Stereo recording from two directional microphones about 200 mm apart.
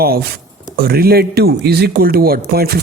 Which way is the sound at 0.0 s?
50° right (ahead or behind).